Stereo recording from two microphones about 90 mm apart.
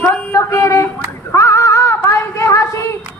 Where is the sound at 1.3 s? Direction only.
35° left (ahead or behind).